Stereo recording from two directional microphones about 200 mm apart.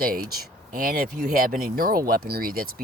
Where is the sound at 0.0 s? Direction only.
45° right (ahead or behind).